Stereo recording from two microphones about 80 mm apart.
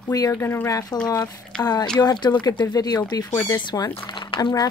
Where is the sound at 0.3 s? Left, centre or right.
Left.